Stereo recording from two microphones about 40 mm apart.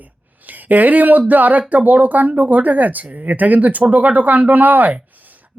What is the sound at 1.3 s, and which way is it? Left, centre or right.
Speech, right.